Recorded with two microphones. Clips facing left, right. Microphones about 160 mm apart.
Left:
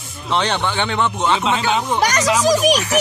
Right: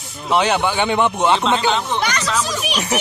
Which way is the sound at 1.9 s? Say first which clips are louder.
Left 3 dB; 40° left (ahead or behind).